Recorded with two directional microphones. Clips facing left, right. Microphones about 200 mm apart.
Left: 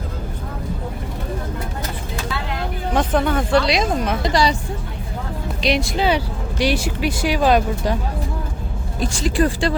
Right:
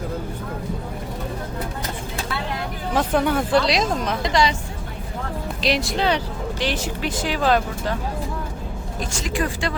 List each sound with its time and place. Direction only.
2.9 s speech: 5° right (ahead or behind)
4.2 s speech: 35° left (ahead or behind)
5.6 s speech: centre (ahead or behind)
9.0 s speech: 35° left (ahead or behind)